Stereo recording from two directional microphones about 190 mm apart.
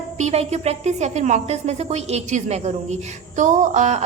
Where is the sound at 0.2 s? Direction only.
35° right (ahead or behind).